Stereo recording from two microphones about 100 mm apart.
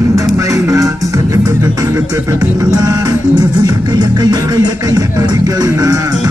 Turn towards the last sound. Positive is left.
turn(degrees=-35)  # may be behind; listen again after turning